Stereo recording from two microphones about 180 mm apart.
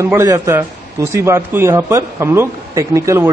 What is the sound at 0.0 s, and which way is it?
A man's voice, 15° right (ahead or behind).